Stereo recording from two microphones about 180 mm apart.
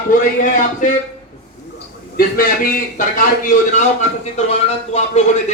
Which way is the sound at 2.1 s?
50° left (ahead or behind).